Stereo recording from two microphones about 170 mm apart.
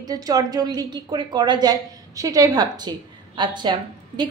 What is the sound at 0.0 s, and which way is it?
A woman's voice, 20° right (ahead or behind).